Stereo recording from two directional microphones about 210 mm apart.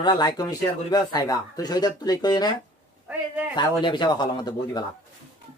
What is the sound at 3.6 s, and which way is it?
Speech, 20° left (ahead or behind).